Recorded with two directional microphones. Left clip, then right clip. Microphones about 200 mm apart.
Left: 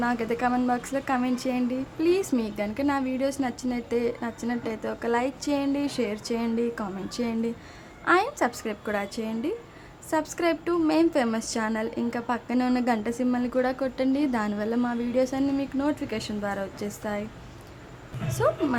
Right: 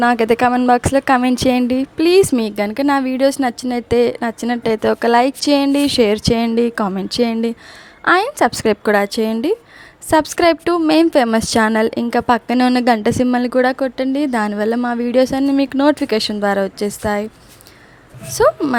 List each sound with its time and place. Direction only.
0.0 s a woman's voice: 45° right (ahead or behind)
18.3 s a woman's voice: 40° right (ahead or behind)